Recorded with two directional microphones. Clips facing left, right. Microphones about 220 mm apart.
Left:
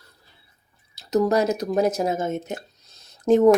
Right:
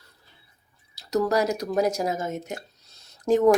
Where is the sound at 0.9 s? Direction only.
20° left (ahead or behind).